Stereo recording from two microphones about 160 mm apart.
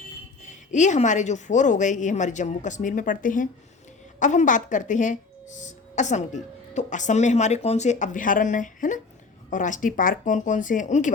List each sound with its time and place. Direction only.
0.7 s speech: 50° left (ahead or behind)